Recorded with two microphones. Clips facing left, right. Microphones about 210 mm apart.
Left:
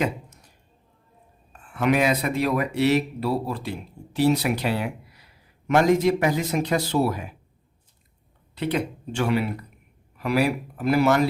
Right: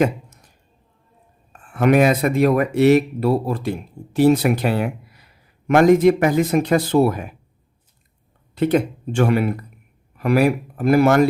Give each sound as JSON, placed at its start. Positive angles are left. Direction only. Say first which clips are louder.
{"t": 1.7, "sound": "speech", "louder": "right 6 dB", "side_deg": -50}
{"t": 8.5, "sound": "speech", "louder": "right 8 dB", "side_deg": -50}